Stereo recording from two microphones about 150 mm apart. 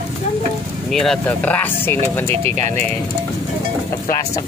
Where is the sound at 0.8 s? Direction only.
5° left (ahead or behind).